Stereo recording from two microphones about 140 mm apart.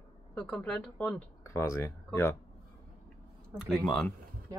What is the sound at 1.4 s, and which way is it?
Speech, 20° left (ahead or behind).